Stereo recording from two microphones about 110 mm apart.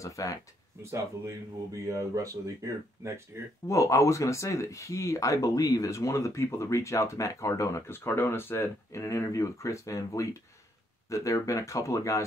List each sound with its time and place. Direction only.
0.0 s speech: 30° left (ahead or behind)
0.9 s speech: 30° right (ahead or behind)
3.6 s speech: 30° left (ahead or behind)